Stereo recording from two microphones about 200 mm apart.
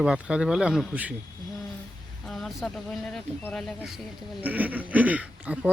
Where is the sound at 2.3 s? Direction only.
Centre (ahead or behind).